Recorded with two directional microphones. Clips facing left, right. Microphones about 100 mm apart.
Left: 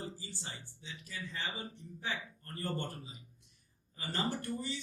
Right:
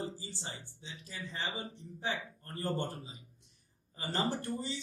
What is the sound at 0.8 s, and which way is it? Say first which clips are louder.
Speech: even; 30° right (ahead or behind).